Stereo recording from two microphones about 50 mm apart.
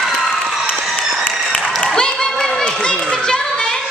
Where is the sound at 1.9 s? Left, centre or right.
Centre.